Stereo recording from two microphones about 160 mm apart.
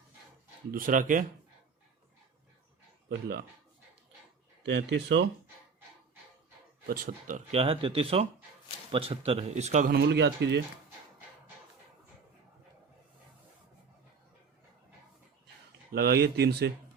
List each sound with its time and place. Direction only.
0.7 s speech: 60° right (ahead or behind)
4.6 s speech: 90° right
6.8 s speech: 65° right (ahead or behind)
7.5 s speech: 35° right (ahead or behind)
9.9 s speech: 90° right
15.9 s speech: 85° right